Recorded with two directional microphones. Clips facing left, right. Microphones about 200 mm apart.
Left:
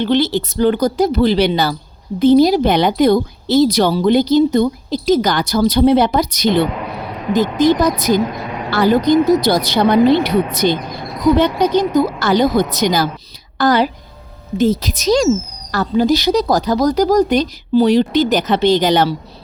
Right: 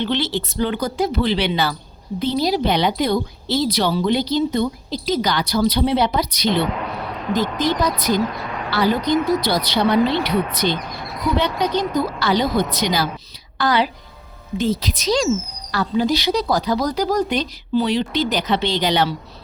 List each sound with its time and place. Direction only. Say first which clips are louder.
0.0 s a woman's voice: left 7 dB; 40° left (ahead or behind)